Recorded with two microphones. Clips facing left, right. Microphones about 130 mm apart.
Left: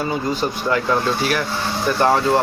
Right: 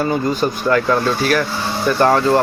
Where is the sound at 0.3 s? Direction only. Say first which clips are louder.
Right 4 dB; 20° left (ahead or behind).